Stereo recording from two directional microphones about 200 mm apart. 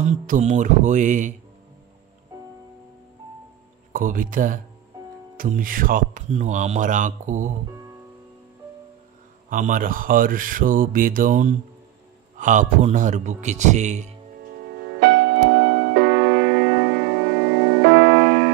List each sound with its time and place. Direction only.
0.0 s speech: 35° right (ahead or behind)
2.3 s music: 20° right (ahead or behind)
3.9 s speech: 45° right (ahead or behind)
9.5 s speech: 40° right (ahead or behind)
15.0 s music: 60° right (ahead or behind)